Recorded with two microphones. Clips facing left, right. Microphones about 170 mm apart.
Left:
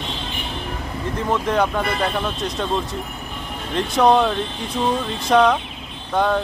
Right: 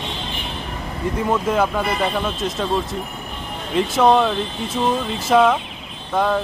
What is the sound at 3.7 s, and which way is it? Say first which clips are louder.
Speech: right 1 dB; centre (ahead or behind).